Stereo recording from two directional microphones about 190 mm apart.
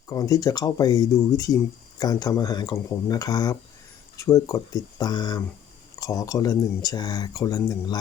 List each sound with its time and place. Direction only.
0.1 s speech: 20° left (ahead or behind)